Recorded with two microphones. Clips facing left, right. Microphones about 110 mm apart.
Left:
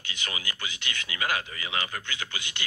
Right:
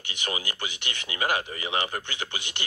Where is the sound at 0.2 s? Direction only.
25° right (ahead or behind).